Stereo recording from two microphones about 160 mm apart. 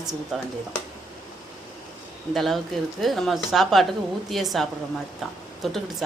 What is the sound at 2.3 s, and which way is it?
A woman's voice, centre (ahead or behind).